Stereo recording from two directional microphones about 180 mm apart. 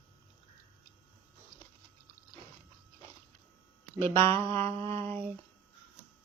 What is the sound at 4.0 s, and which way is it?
Speech, 15° left (ahead or behind).